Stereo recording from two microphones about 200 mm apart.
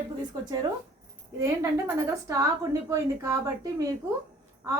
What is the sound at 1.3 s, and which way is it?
A woman's voice, 15° right (ahead or behind).